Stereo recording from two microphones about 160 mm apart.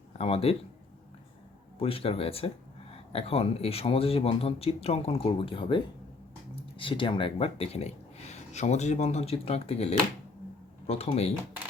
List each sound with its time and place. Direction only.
0.2 s speech: 40° left (ahead or behind)
1.8 s speech: 35° left (ahead or behind)